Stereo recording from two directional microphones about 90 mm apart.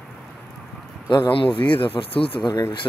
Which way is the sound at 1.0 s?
60° left (ahead or behind).